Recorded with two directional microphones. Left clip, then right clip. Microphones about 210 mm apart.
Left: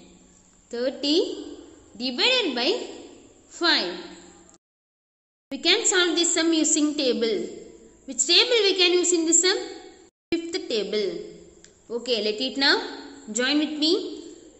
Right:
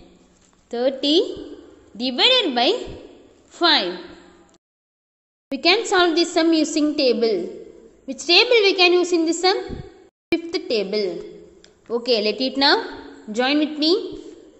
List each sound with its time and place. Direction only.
0.7 s a woman's voice: 20° right (ahead or behind)
5.5 s a woman's voice: 20° right (ahead or behind)
10.3 s a sound: 15° right (ahead or behind)
11.6 s a woman's voice: 20° right (ahead or behind)